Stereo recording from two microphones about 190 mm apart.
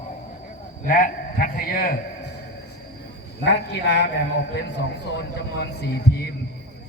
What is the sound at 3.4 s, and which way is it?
A man's voice, 65° left (ahead or behind).